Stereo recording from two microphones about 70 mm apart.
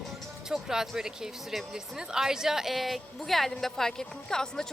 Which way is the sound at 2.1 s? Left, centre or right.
Centre.